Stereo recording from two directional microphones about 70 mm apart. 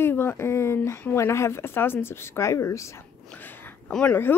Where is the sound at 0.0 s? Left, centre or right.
Left.